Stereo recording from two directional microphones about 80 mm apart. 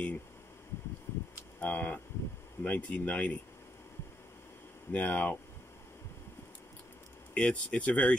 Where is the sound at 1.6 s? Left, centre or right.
Left.